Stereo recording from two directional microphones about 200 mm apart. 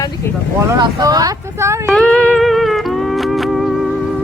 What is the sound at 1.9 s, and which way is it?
Music, centre (ahead or behind).